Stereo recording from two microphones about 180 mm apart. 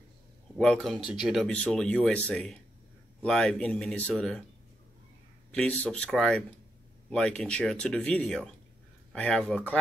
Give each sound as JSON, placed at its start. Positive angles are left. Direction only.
{"t": 0.6, "sound": "speech", "side_deg": 5}
{"t": 5.5, "sound": "speech", "side_deg": 5}